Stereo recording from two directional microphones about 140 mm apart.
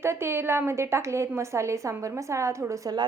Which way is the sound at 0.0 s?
20° right (ahead or behind).